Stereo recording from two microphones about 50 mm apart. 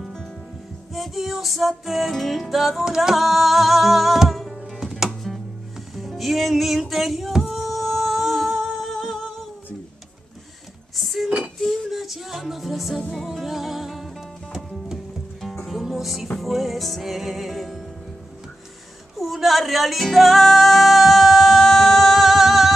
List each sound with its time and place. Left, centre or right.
0.9 s music: centre
11.0 s music: centre
11.2 s a sound: right
11.6 s music: centre
15.5 s music: centre
19.1 s music: centre